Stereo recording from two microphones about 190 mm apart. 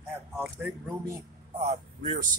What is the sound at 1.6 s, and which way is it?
Speech, 35° right (ahead or behind).